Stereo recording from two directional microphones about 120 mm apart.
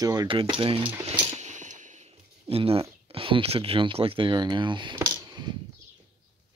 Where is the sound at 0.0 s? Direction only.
30° right (ahead or behind).